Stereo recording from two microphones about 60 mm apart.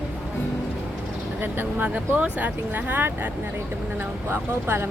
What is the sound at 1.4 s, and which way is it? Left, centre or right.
Speech, right.